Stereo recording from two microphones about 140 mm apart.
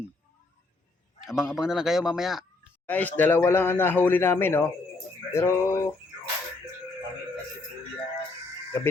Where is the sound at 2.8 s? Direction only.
10° left (ahead or behind).